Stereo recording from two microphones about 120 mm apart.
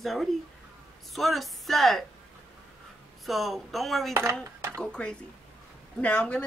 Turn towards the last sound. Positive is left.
turn(degrees=10)  # may be behind; listen again after turning